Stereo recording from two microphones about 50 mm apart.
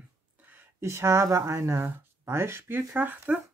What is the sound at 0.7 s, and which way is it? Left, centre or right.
Speech, right.